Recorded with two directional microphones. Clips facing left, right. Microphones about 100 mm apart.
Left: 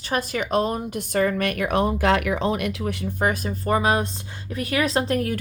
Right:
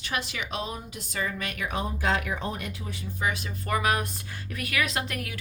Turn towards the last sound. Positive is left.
turn(degrees=35)  # may be behind; listen again after turning